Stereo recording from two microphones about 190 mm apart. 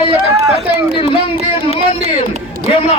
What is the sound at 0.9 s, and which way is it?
Speech, 25° left (ahead or behind).